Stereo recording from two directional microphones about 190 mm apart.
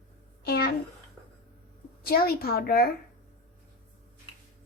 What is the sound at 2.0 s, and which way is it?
Speech, 50° left (ahead or behind).